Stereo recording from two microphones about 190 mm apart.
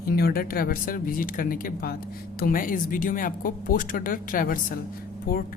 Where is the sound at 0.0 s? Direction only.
55° left (ahead or behind).